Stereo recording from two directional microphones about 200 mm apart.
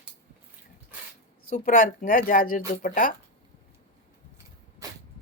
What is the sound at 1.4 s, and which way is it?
Speech, 45° left (ahead or behind).